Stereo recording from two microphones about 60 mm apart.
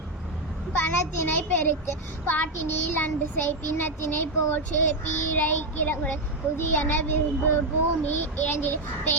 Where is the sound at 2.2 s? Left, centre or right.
Left.